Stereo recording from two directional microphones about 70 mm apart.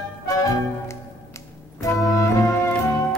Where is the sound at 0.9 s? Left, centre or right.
Left.